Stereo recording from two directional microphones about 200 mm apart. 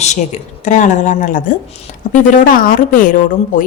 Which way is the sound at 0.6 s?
35° left (ahead or behind).